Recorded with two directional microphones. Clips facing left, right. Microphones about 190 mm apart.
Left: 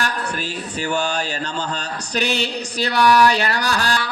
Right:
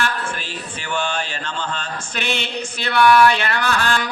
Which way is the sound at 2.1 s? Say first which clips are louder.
Left 4 dB; 40° left (ahead or behind).